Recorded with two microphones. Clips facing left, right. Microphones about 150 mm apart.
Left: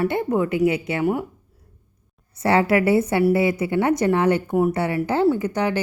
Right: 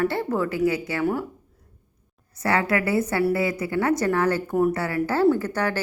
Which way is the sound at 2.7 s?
25° left (ahead or behind).